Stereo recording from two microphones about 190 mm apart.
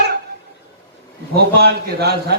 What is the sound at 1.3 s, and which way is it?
A man's voice, 55° right (ahead or behind).